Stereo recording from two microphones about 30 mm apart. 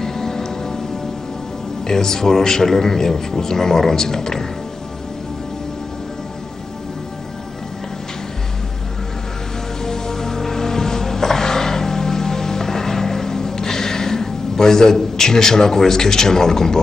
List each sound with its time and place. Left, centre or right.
0.0 s music: centre
1.9 s speech: centre
9.8 s music: centre